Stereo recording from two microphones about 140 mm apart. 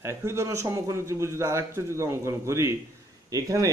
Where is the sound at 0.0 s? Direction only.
20° right (ahead or behind).